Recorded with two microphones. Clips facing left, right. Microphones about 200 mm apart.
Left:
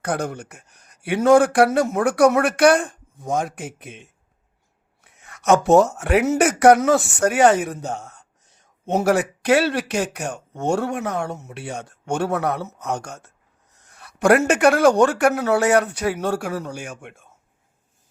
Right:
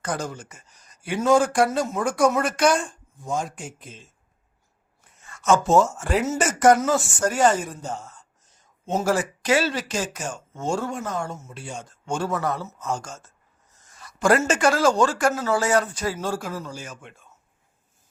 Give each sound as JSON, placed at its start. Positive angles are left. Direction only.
{"t": 0.0, "sound": "speech", "side_deg": 60}